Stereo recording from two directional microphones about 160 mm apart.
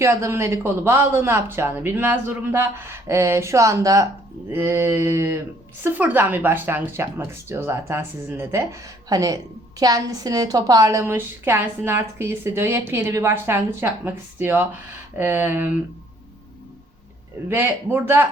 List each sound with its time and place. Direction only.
0.0 s speech: 15° right (ahead or behind)
17.5 s speech: 15° right (ahead or behind)